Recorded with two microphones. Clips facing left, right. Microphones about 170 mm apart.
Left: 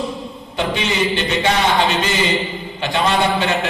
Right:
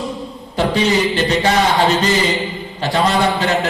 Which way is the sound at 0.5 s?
40° right (ahead or behind).